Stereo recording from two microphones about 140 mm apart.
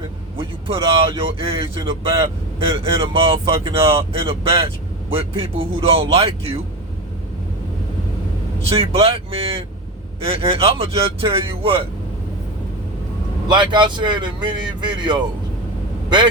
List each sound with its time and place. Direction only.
0.3 s speech: 40° right (ahead or behind)
8.7 s speech: 45° right (ahead or behind)
13.5 s speech: 35° right (ahead or behind)